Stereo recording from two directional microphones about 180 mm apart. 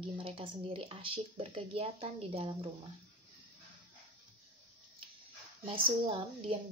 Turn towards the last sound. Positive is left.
turn(degrees=-30)  # may be behind; listen again after turning